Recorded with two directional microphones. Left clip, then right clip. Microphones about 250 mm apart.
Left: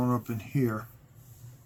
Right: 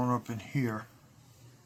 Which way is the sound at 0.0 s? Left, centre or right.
Centre.